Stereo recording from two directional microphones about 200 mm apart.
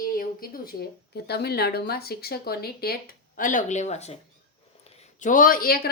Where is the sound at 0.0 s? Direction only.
45° left (ahead or behind).